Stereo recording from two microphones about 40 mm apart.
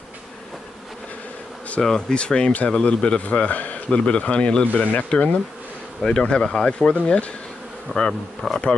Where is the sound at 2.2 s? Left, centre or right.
Left.